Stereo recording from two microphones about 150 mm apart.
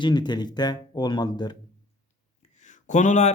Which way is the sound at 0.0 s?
30° left (ahead or behind).